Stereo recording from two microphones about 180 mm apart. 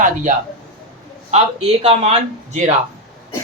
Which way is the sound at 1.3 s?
35° right (ahead or behind).